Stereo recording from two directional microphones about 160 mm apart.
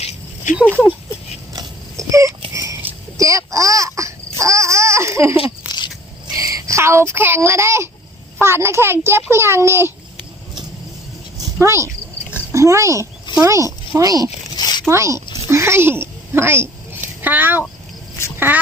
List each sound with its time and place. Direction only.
0.0 s a sound: 45° left (ahead or behind)
0.6 s speech: 5° left (ahead or behind)
1.5 s dog: 20° right (ahead or behind)
2.5 s babbling: 20° right (ahead or behind)
5.4 s a sound: 30° left (ahead or behind)
6.3 s a child's voice: 20° right (ahead or behind)
11.3 s a sound: 15° right (ahead or behind)
13.4 s speech: 20° right (ahead or behind)
14.5 s zipper: 25° left (ahead or behind)
14.8 s a child's voice: 20° right (ahead or behind)
15.4 s a sound: 15° right (ahead or behind)
17.2 s speech: 10° right (ahead or behind)